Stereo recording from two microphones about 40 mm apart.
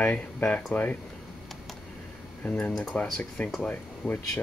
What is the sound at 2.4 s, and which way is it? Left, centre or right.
Speech, left.